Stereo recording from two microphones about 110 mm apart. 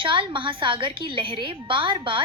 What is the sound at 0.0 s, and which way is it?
A woman's voice, 50° right (ahead or behind).